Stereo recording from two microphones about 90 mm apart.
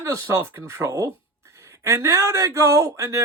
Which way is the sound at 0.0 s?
35° right (ahead or behind).